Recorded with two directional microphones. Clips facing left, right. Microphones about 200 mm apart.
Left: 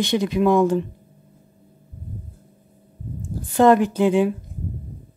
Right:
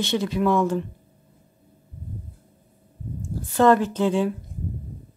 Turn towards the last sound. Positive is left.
turn(degrees=15)  # may be behind; listen again after turning